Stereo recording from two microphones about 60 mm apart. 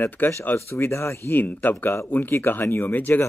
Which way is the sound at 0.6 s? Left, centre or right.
Left.